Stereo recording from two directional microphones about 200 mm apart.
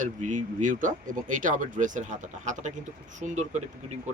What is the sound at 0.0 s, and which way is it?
Speech, 40° right (ahead or behind).